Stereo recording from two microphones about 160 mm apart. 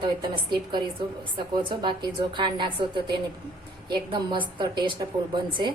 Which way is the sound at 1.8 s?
30° right (ahead or behind).